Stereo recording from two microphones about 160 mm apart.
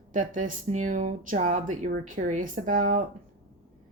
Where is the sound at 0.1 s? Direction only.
55° right (ahead or behind).